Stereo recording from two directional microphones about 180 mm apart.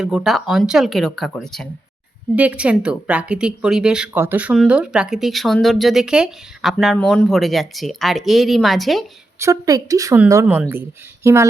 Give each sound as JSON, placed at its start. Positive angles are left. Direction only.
{"t": 0.0, "sound": "a woman's voice", "side_deg": 0}
{"t": 9.4, "sound": "speech", "side_deg": -20}